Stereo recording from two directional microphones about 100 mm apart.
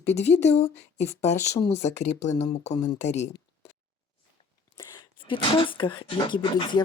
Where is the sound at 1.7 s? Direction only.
90° left.